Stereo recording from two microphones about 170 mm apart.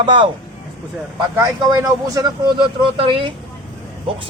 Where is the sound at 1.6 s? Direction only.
20° right (ahead or behind).